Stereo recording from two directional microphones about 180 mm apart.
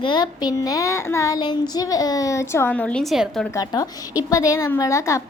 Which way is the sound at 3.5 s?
20° left (ahead or behind).